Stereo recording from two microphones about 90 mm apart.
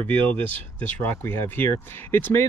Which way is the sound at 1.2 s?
25° left (ahead or behind).